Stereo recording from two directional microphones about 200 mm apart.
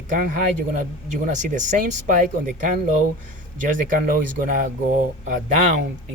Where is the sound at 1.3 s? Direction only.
40° right (ahead or behind).